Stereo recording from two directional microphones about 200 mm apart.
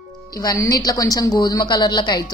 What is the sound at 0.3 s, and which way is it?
Speech, 20° left (ahead or behind).